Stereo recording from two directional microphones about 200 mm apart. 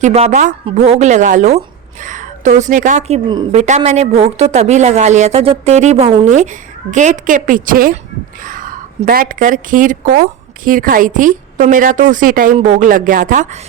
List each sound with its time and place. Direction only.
0.0 s a woman's voice: 35° right (ahead or behind)